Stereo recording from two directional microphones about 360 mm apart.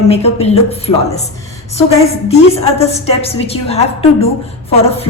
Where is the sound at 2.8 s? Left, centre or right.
Centre.